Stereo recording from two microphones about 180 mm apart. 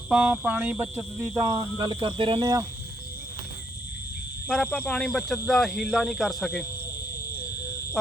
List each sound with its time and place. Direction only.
0.1 s speech: 5° right (ahead or behind); by 2.6 s 20° right (ahead or behind)
4.4 s speech: 5° left (ahead or behind)